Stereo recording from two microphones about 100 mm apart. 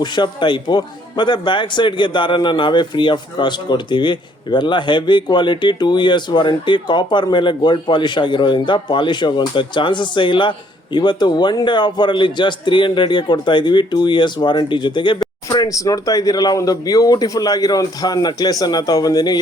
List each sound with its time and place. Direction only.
0.0 s a man's voice: 50° left (ahead or behind)